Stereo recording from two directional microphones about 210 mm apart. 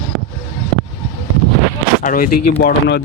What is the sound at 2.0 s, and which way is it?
Speech, 40° left (ahead or behind).